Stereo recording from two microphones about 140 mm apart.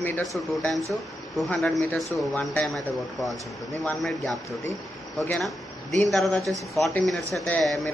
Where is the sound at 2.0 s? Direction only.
5° left (ahead or behind).